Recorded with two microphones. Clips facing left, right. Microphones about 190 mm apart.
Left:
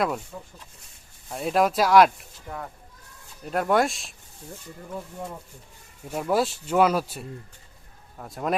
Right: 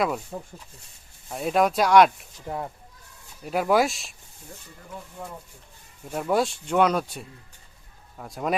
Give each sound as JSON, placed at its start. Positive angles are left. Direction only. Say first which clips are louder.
{"t": 0.3, "sound": "speech", "louder": "right 5 dB", "side_deg": -45}
{"t": 1.3, "sound": "speech", "louder": "even", "side_deg": 0}
{"t": 2.5, "sound": "speech", "louder": "right 5 dB", "side_deg": -35}
{"t": 3.4, "sound": "speech", "louder": "right 1 dB", "side_deg": -5}
{"t": 6.1, "sound": "speech", "louder": "even", "side_deg": 0}